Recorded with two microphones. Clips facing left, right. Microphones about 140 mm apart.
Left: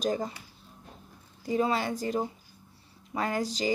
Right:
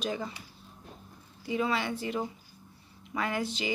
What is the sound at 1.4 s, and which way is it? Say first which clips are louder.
A woman's voice: left 3 dB; 40° left (ahead or behind).